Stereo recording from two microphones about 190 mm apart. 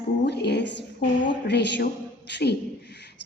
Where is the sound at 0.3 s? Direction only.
60° left (ahead or behind).